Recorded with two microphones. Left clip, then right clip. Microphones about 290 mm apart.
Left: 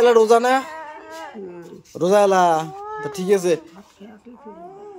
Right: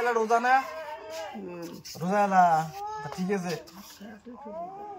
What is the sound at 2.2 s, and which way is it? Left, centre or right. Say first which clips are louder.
Speech: left 3 dB; left.